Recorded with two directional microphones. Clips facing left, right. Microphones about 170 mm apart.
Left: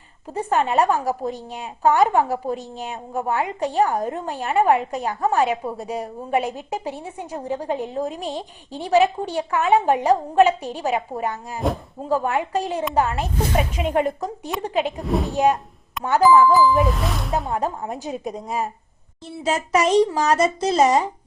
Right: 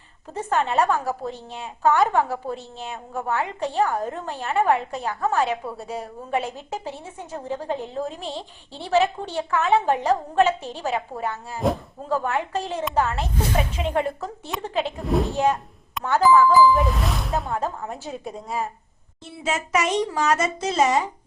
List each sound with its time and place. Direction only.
0.3 s a woman's voice: 15° left (ahead or behind)
15.0 s speech: centre (ahead or behind)
17.5 s a woman's voice: 15° left (ahead or behind)
19.4 s a child's voice: 35° left (ahead or behind)